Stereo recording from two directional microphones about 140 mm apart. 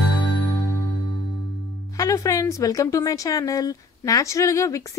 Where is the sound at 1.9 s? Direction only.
25° left (ahead or behind).